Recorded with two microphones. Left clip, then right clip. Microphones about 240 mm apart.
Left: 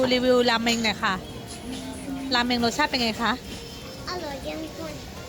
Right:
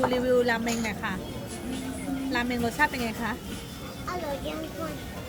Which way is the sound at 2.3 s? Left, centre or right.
Left.